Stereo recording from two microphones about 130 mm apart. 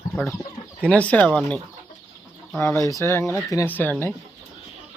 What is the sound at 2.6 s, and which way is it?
Speech, 25° left (ahead or behind).